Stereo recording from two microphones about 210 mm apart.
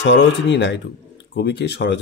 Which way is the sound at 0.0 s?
60° left (ahead or behind).